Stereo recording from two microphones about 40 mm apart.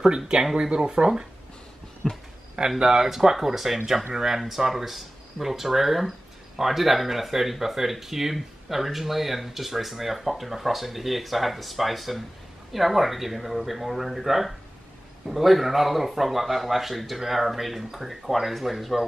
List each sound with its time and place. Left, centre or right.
0.0 s speech: centre
2.0 s speech: centre
2.8 s speech: centre